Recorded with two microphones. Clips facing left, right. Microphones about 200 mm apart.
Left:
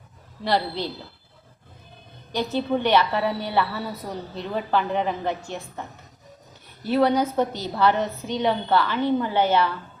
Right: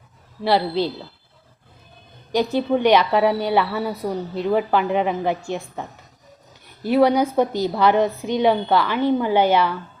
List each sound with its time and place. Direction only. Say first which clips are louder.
0.4 s a woman's voice: right 5 dB; 10° right (ahead or behind)
2.3 s a woman's voice: right 5 dB; 15° right (ahead or behind)
6.8 s a woman's voice: right 4 dB; 10° right (ahead or behind)